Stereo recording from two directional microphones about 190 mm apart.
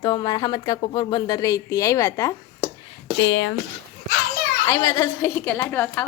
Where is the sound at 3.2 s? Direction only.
70° left (ahead or behind).